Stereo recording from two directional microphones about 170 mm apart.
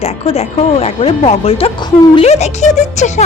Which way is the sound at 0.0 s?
35° left (ahead or behind).